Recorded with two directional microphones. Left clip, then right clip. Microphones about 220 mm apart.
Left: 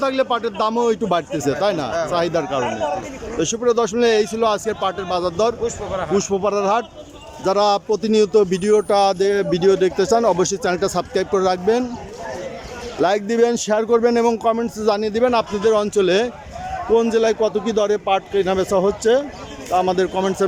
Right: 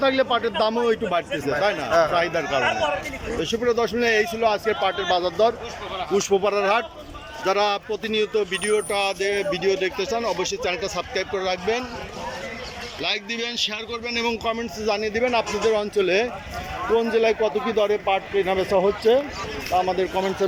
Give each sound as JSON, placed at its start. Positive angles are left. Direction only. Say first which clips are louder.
{"t": 0.0, "sound": "a man's voice", "louder": "left 1 dB", "side_deg": 10}
{"t": 13.0, "sound": "a man's voice", "louder": "left 10 dB", "side_deg": 35}